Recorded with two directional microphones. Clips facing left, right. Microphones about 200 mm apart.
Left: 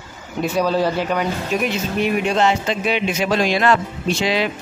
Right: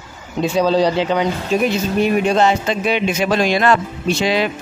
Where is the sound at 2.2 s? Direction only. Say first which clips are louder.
Right 3 dB; 40° right (ahead or behind).